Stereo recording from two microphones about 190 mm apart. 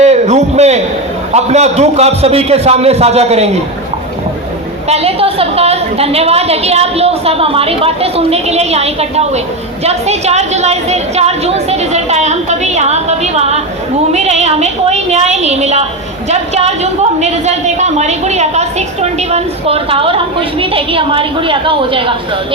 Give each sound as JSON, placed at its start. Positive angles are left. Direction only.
{"t": 0.0, "sound": "a sound", "side_deg": -35}
{"t": 1.3, "sound": "a woman's voice", "side_deg": -35}
{"t": 4.9, "sound": "a woman's voice", "side_deg": -30}